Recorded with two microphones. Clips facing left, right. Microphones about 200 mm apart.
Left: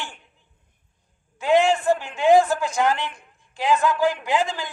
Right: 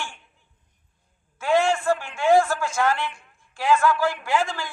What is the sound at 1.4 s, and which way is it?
A man's voice, 20° left (ahead or behind).